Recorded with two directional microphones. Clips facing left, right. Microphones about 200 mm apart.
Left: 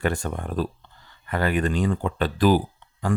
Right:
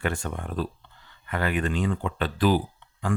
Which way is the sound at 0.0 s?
40° left (ahead or behind).